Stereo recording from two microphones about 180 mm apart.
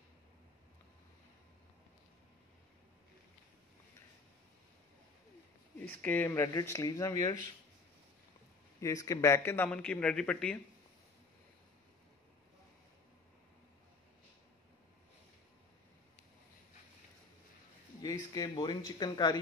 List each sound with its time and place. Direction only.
5.9 s speech: 10° left (ahead or behind)
8.8 s speech: 20° left (ahead or behind)
18.0 s speech: 20° left (ahead or behind)